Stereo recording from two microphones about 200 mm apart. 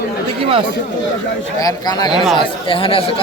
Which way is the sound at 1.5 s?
20° left (ahead or behind).